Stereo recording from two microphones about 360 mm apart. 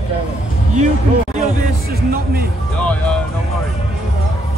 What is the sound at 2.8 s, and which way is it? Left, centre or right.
Music, centre.